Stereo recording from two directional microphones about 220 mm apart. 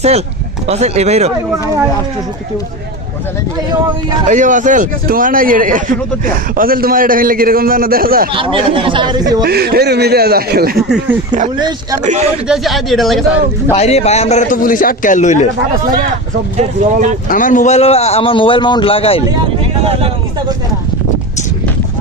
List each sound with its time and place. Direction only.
0.7 s speech: 30° right (ahead or behind)
4.3 s a man's voice: 35° right (ahead or behind)
8.4 s speech: 25° right (ahead or behind)
9.4 s speech: 45° right (ahead or behind)
10.8 s a man's voice: centre (ahead or behind)
12.0 s a man's voice: 30° right (ahead or behind)
12.5 s a man's voice: centre (ahead or behind)
13.7 s a man's voice: 30° left (ahead or behind)
16.6 s a man's voice: 35° right (ahead or behind)
17.2 s a man's voice: 35° left (ahead or behind)